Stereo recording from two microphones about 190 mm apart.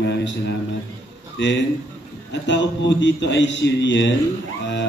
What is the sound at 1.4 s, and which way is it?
A man's voice, 70° left (ahead or behind).